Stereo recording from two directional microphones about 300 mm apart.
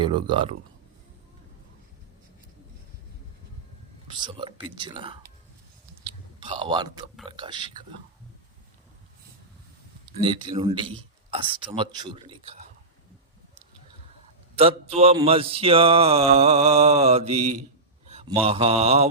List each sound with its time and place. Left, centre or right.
0.0 s speech: centre
4.1 s speech: centre
6.1 s whispering: centre
7.3 s speech: centre
10.2 s speech: centre
14.5 s mantra: centre
18.0 s a sound: right
18.4 s mantra: centre